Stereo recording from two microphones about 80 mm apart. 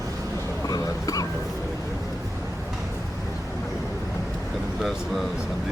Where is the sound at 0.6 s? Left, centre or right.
Left.